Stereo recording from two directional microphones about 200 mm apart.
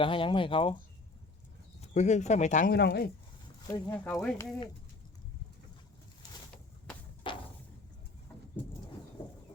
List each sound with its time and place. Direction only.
0.0 s speech: 25° left (ahead or behind)
1.8 s speech: 35° left (ahead or behind)
2.7 s speech: 55° left (ahead or behind)
3.7 s speech: 20° left (ahead or behind)
4.0 s speech: 5° left (ahead or behind)
7.3 s a sound: 25° left (ahead or behind)